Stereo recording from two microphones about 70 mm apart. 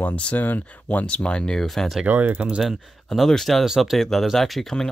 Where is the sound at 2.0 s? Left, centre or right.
Right.